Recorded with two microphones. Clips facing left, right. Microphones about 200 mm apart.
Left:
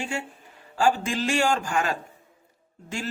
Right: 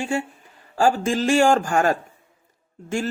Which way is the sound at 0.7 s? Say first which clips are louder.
Right 4 dB; 45° right (ahead or behind).